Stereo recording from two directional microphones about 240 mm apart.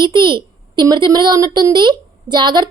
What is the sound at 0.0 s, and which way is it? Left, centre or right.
A child's voice, centre.